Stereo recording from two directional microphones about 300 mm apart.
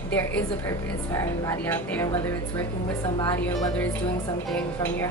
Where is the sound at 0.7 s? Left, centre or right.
Centre.